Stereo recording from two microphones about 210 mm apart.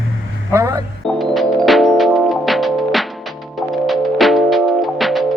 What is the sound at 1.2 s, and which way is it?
Music, centre (ahead or behind).